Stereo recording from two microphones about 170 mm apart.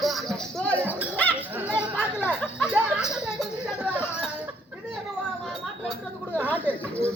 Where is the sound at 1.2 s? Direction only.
10° left (ahead or behind).